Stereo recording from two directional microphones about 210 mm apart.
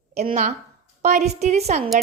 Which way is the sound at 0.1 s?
30° right (ahead or behind).